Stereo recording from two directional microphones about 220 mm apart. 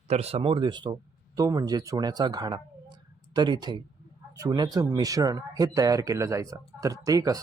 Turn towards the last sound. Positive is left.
turn(degrees=-15)  # may be behind; listen again after turning